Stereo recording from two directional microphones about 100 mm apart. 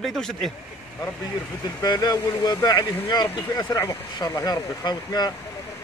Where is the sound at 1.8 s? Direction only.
45° left (ahead or behind).